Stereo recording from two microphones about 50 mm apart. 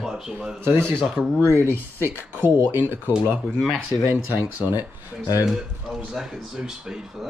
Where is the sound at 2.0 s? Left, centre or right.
Right.